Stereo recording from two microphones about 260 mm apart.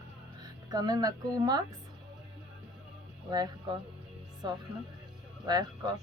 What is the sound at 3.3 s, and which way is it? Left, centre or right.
Speech, centre.